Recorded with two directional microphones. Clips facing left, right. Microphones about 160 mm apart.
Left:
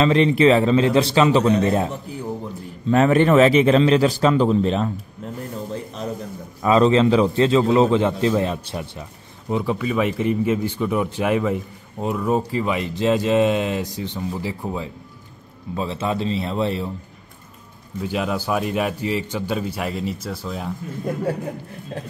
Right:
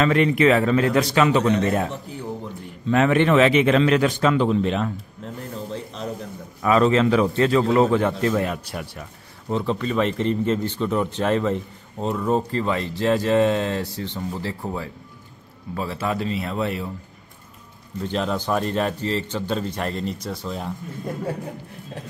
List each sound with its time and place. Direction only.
0.0 s a man's voice: 30° left (ahead or behind)
2.9 s speech: 35° left (ahead or behind)
6.6 s a man's voice: 30° left (ahead or behind)
9.5 s a man's voice: 10° left (ahead or behind); by 16.9 s 25° left (ahead or behind)
18.0 s speech: 10° left (ahead or behind)